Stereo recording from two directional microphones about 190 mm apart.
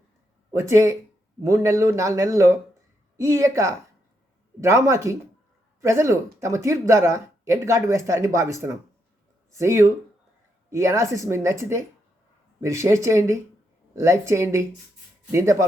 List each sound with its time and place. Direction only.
0.5 s speech: 15° right (ahead or behind)